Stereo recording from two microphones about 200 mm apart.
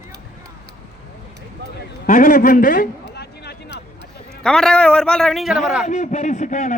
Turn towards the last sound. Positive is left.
turn(degrees=35)  # may be behind; listen again after turning